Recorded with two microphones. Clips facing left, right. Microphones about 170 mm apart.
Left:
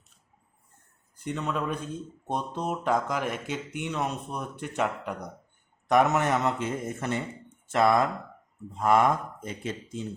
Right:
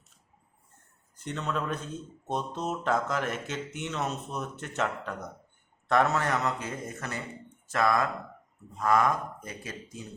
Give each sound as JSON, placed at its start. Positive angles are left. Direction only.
{"t": 1.2, "sound": "speech", "side_deg": 10}